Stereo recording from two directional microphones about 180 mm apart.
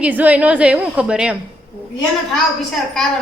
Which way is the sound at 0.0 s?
10° right (ahead or behind).